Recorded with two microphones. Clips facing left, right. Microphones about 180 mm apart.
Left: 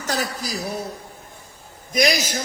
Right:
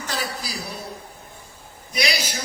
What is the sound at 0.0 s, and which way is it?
Speech, 45° left (ahead or behind).